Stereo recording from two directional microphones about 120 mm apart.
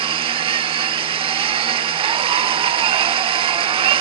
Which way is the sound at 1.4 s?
50° right (ahead or behind).